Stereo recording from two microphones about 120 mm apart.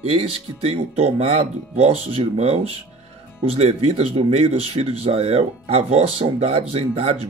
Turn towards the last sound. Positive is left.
turn(degrees=-55)  # may be behind; listen again after turning